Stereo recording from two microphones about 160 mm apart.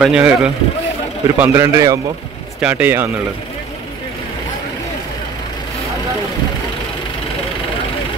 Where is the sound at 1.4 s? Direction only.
15° right (ahead or behind).